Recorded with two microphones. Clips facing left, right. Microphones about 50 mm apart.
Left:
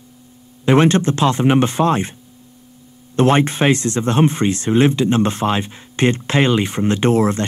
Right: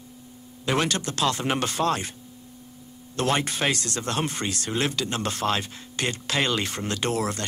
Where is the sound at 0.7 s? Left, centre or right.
Left.